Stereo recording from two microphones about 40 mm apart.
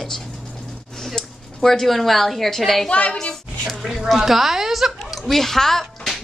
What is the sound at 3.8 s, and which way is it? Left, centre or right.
A woman's voice, centre.